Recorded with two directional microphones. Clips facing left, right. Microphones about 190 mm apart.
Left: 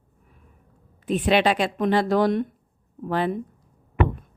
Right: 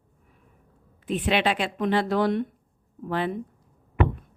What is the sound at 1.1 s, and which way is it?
Speech, 40° left (ahead or behind).